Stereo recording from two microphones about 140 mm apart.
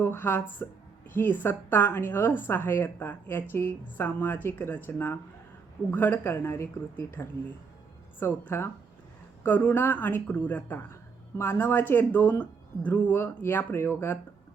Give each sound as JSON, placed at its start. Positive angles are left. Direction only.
{"t": 0.0, "sound": "speech", "side_deg": 15}